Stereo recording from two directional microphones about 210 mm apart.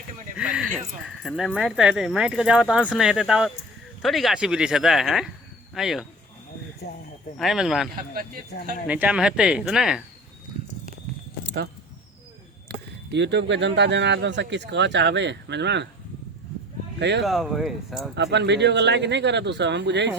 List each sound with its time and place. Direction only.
0.3 s a sound: 5° right (ahead or behind)
0.7 s speech: centre (ahead or behind)
6.8 s speech: 50° left (ahead or behind)
7.3 s speech: centre (ahead or behind)
7.9 s speech: 45° right (ahead or behind)
8.9 s speech: 5° right (ahead or behind)
11.4 s a sound: 50° right (ahead or behind)
12.6 s speech: 55° right (ahead or behind)
17.0 s speech: 55° right (ahead or behind)
17.2 s speech: centre (ahead or behind)
18.2 s speech: 55° right (ahead or behind)